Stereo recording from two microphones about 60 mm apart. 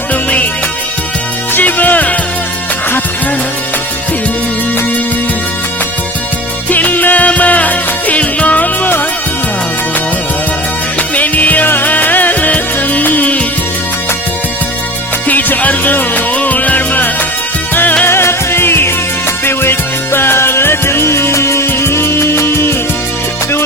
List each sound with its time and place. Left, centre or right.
0.1 s music: left
1.5 s music: left
6.7 s music: left
11.1 s music: left
15.3 s music: left
18.0 s music: left
20.1 s music: left